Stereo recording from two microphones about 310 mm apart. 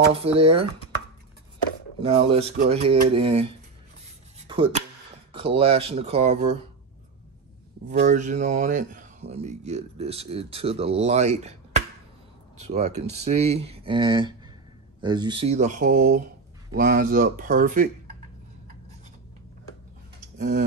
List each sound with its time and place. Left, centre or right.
0.1 s speech: centre
2.0 s speech: centre
8.0 s speech: right